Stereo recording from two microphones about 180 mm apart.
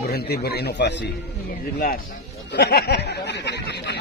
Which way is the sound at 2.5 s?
65° left (ahead or behind).